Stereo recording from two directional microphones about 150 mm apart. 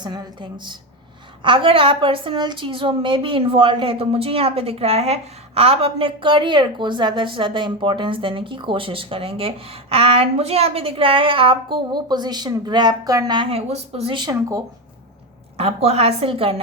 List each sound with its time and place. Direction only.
0.0 s a woman's voice: 30° right (ahead or behind)
15.5 s a woman's voice: 40° right (ahead or behind)